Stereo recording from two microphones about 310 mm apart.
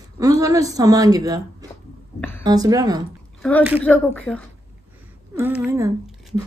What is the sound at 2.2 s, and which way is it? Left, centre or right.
Speech, centre.